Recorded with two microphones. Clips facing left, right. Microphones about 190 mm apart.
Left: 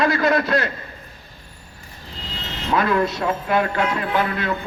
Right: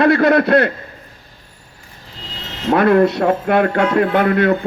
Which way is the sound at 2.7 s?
60° right (ahead or behind).